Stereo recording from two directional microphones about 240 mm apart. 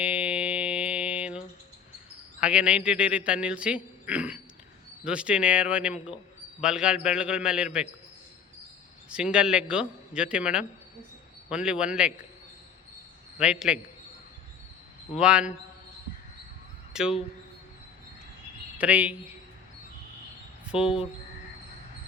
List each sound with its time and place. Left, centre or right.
0.0 s music: centre
2.4 s a man's voice: centre
9.0 s a man's voice: centre
13.4 s a man's voice: centre
15.1 s a man's voice: centre
16.9 s speech: centre
18.8 s a man's voice: centre
20.7 s speech: centre